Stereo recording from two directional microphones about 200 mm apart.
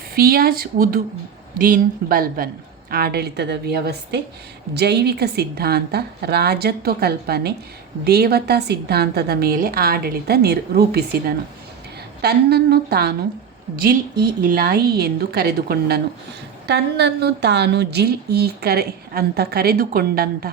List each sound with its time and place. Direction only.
0.1 s a woman's voice: 50° right (ahead or behind)
14.4 s a woman's voice: 45° right (ahead or behind)